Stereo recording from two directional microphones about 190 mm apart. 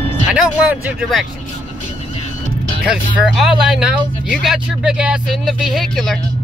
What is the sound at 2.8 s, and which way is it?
Speech, 5° right (ahead or behind).